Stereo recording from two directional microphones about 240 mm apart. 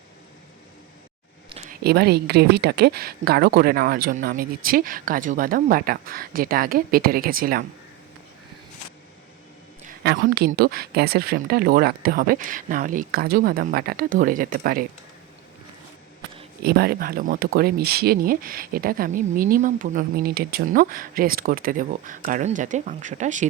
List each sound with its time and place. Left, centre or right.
1.7 s speech: right
9.8 s speech: right
16.6 s speech: right